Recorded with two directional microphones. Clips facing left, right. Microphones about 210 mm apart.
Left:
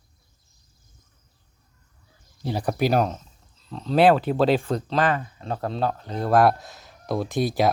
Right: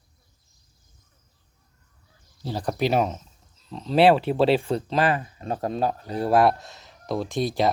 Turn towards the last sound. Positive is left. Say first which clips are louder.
# left 1 dB
turn(degrees=5)  # may be behind; listen again after turning